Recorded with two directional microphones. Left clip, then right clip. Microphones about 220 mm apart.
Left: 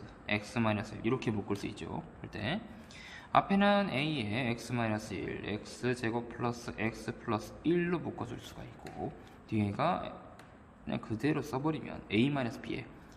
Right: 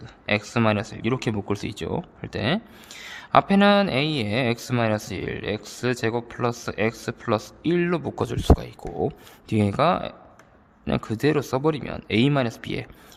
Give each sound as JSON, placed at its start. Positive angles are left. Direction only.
{"t": 0.3, "sound": "speech", "side_deg": -50}